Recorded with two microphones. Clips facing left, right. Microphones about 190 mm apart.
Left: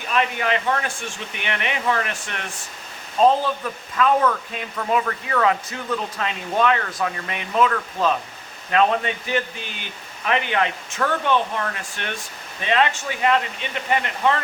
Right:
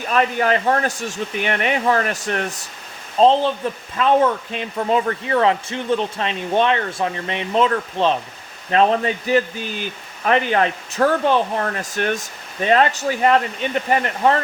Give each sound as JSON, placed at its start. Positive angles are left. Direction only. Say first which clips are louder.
{"t": 0.1, "sound": "speech", "louder": "right 4 dB", "side_deg": -40}
{"t": 3.2, "sound": "speech", "louder": "right 3 dB", "side_deg": -30}